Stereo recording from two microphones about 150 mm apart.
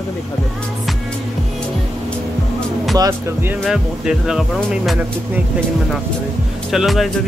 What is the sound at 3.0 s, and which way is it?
Speech, 20° right (ahead or behind).